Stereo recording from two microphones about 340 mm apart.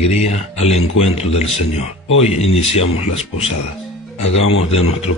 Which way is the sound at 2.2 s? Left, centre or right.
Centre.